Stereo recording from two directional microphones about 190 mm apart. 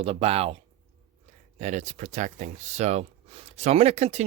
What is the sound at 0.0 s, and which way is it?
Speech, 30° right (ahead or behind).